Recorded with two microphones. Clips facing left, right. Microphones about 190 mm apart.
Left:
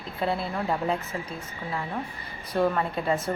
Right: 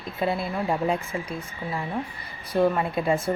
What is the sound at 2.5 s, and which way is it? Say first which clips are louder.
Speech: right 3 dB; 10° right (ahead or behind).